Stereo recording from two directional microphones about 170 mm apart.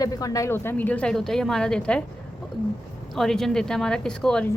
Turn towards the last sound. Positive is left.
turn(degrees=5)  # may be behind; listen again after turning